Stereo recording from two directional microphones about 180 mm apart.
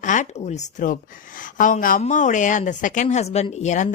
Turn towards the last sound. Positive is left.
turn(degrees=40)  # may be behind; listen again after turning